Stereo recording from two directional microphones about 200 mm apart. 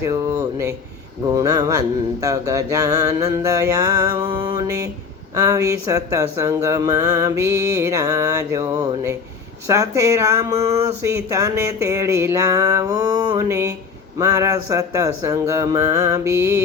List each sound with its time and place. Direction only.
0.0 s speech: 15° right (ahead or behind)